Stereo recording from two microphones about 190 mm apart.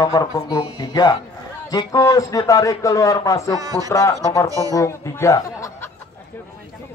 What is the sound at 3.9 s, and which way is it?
Speech, 15° left (ahead or behind).